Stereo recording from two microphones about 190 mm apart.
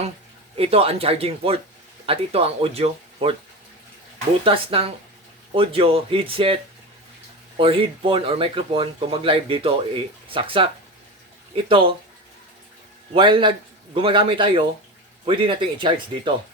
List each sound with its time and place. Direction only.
0.5 s speech: 30° right (ahead or behind)
4.4 s speech: 30° right (ahead or behind)
13.1 s speech: 25° right (ahead or behind)